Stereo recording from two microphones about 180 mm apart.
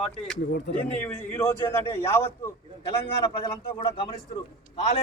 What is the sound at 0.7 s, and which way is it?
Speech, 80° left.